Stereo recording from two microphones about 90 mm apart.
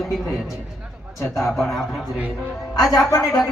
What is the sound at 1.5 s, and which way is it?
Speech, centre (ahead or behind).